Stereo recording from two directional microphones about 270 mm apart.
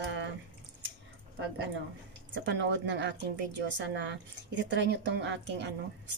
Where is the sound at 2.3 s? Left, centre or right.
Right.